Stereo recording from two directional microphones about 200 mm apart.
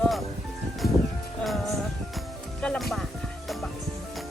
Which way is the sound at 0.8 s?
50° left (ahead or behind).